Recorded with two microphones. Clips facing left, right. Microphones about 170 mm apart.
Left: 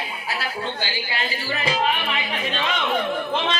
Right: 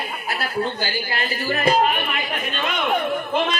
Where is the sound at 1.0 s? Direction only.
50° right (ahead or behind).